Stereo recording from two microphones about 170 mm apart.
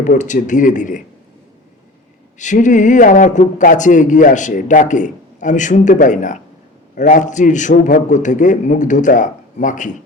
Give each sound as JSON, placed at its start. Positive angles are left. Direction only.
{"t": 0.2, "sound": "a man's voice", "side_deg": 45}
{"t": 2.4, "sound": "a man's voice", "side_deg": 45}